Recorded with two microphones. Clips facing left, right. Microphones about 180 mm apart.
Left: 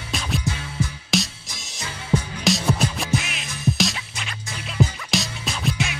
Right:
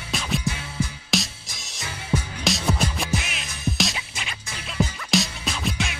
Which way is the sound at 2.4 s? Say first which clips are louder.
Left 3 dB; centre (ahead or behind).